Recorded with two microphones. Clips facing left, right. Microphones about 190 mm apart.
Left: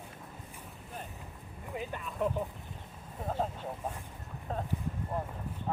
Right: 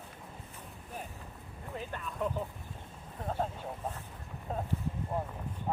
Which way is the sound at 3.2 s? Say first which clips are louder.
Left 1 dB; 5° left (ahead or behind).